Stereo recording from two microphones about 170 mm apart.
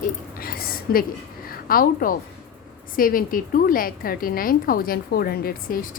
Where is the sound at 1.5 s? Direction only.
55° left (ahead or behind).